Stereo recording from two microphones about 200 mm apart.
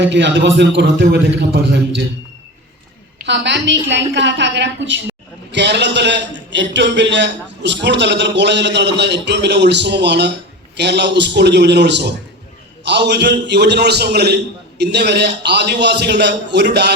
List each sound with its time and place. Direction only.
0.0 s a man's voice: 60° right (ahead or behind)
3.2 s a man's voice: 60° right (ahead or behind)